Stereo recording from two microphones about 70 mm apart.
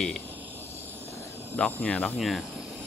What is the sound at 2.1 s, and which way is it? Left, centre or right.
Speech, centre.